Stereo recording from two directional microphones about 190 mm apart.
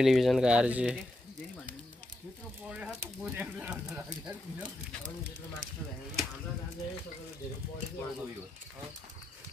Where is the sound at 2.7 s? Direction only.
5° right (ahead or behind).